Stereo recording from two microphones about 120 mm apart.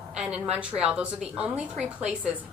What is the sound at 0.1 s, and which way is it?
A woman's voice, 10° right (ahead or behind).